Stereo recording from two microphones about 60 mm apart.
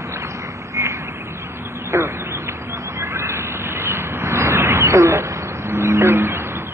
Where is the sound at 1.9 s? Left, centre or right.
Right.